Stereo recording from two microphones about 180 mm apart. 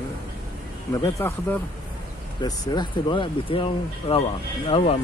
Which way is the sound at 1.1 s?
10° left (ahead or behind).